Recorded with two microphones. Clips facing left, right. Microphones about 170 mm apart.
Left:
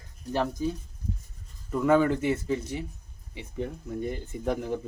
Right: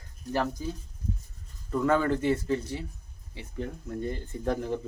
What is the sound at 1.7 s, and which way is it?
Speech, 10° left (ahead or behind).